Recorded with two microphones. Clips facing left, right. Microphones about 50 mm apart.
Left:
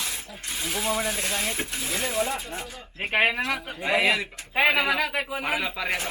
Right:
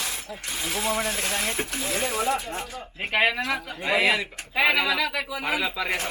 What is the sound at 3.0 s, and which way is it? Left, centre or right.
Speech, left.